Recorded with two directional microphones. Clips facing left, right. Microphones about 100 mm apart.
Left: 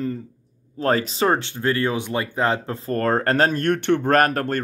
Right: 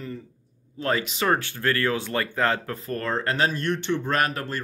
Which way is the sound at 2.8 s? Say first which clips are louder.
Left 8 dB; 45° left (ahead or behind).